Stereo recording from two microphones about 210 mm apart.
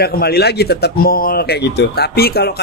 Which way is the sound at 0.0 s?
50° left (ahead or behind).